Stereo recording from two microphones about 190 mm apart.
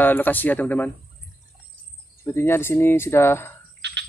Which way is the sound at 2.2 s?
15° left (ahead or behind).